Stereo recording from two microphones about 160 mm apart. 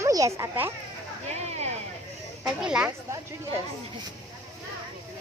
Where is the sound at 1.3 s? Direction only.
45° right (ahead or behind).